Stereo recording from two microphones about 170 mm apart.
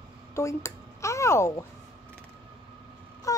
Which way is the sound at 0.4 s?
15° left (ahead or behind).